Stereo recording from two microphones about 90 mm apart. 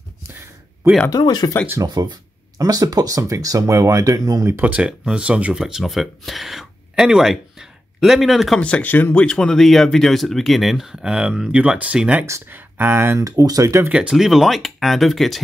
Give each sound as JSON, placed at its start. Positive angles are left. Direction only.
{"t": 1.1, "sound": "speech", "side_deg": 50}
{"t": 1.8, "sound": "speech", "side_deg": -50}
{"t": 4.5, "sound": "speech", "side_deg": -20}
{"t": 8.5, "sound": "speech", "side_deg": 15}
{"t": 13.2, "sound": "speech", "side_deg": -40}
{"t": 13.8, "sound": "speech", "side_deg": -10}